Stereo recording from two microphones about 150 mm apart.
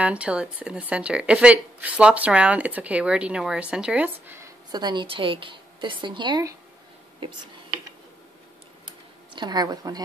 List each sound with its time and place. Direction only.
0.0 s speech: 10° right (ahead or behind); by 6.5 s 30° right (ahead or behind)
9.3 s a woman's voice: 30° right (ahead or behind)